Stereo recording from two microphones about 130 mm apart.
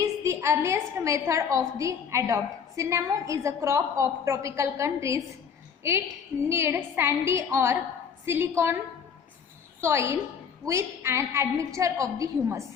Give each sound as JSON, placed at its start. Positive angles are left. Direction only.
{"t": 0.0, "sound": "a woman's voice", "side_deg": -25}
{"t": 9.8, "sound": "a woman's voice", "side_deg": -20}